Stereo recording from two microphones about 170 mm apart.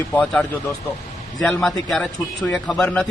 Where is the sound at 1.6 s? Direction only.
Centre (ahead or behind).